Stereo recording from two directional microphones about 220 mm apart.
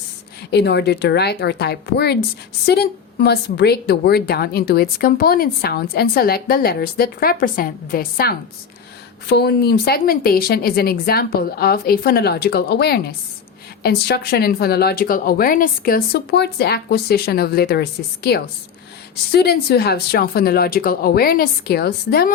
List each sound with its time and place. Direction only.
0.5 s a woman's voice: 50° left (ahead or behind)